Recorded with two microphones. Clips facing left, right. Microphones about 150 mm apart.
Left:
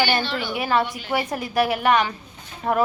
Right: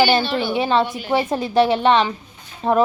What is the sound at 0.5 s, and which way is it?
A woman's voice, 25° right (ahead or behind).